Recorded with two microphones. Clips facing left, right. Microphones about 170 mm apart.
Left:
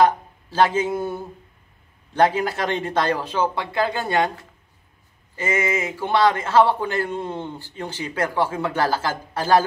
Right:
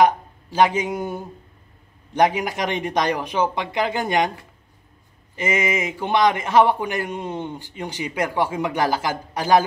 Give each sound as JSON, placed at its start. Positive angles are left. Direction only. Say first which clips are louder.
{"t": 0.0, "sound": "a man's voice", "louder": "right 1 dB", "side_deg": -15}
{"t": 5.3, "sound": "a man's voice", "louder": "right 1 dB", "side_deg": -20}